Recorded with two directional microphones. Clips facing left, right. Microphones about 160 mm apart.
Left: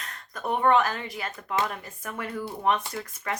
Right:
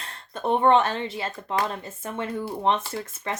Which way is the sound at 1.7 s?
25° right (ahead or behind).